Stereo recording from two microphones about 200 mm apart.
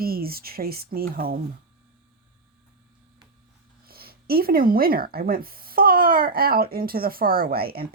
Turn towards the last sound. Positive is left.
turn(degrees=-50)  # may be behind; listen again after turning